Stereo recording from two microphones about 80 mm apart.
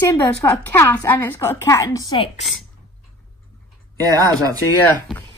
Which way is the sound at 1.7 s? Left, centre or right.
Left.